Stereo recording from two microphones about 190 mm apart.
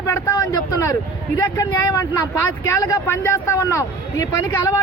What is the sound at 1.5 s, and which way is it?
A man's voice, 15° left (ahead or behind).